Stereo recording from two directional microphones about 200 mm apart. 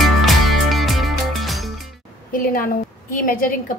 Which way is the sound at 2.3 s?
45° left (ahead or behind).